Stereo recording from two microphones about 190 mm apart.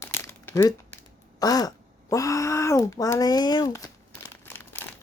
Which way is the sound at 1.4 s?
20° left (ahead or behind).